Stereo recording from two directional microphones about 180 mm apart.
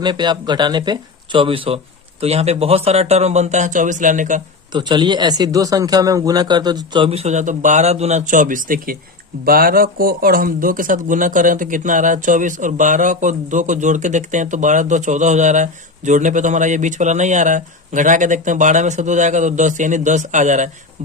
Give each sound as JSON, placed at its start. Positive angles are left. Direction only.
{"t": 0.0, "sound": "speech", "side_deg": -25}
{"t": 4.7, "sound": "speech", "side_deg": -25}